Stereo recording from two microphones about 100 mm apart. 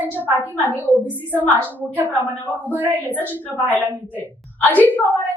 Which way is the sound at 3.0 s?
15° left (ahead or behind).